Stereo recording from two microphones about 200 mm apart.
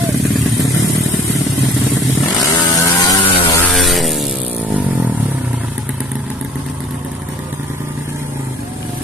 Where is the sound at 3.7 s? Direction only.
Centre (ahead or behind).